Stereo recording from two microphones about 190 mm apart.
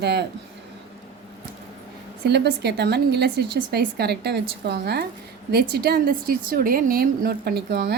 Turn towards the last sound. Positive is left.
turn(degrees=-55)  # may be behind; listen again after turning